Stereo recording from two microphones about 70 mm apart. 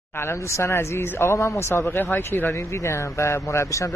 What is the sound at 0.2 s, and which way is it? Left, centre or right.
A man's voice, left.